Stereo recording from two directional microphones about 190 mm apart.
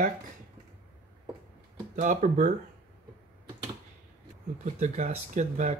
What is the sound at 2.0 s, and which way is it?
Speech, 40° right (ahead or behind).